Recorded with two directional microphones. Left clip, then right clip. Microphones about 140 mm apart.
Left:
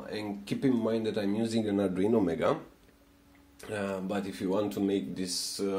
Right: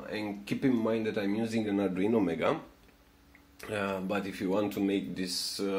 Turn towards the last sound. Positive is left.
turn(degrees=15)  # may be behind; listen again after turning